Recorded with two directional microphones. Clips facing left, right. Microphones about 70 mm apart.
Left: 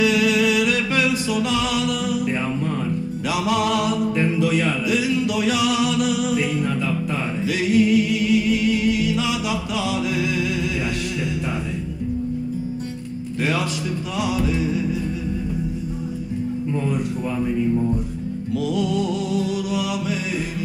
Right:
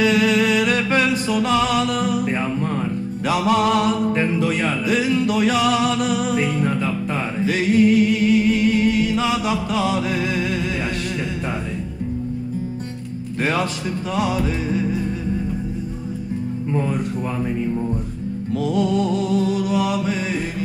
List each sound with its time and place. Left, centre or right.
0.0 s music: right
3.3 s music: right
13.4 s a man's voice: right
14.1 s music: right
18.6 s music: right